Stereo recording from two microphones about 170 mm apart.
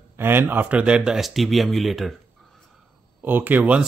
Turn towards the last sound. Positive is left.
turn(degrees=-10)  # may be behind; listen again after turning